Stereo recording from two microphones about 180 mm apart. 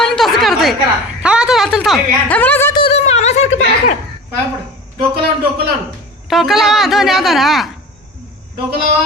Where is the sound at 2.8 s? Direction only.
35° left (ahead or behind).